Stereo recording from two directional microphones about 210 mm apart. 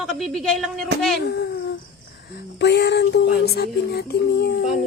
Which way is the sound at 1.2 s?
50° left (ahead or behind).